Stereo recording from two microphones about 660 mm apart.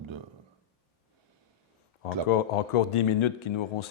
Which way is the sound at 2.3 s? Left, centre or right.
Left.